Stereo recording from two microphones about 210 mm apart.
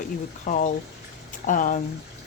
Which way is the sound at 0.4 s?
40° left (ahead or behind).